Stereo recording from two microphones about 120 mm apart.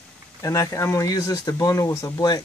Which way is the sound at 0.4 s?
25° left (ahead or behind).